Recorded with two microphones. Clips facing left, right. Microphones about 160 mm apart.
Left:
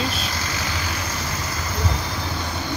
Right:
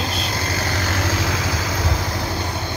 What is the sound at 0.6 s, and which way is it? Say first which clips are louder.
Vehicle: right 5 dB; 60° right (ahead or behind).